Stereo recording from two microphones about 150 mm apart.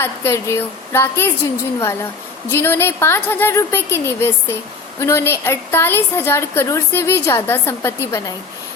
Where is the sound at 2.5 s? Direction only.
15° left (ahead or behind).